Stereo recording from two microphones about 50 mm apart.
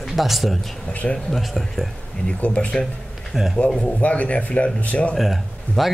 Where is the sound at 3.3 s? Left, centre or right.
Centre.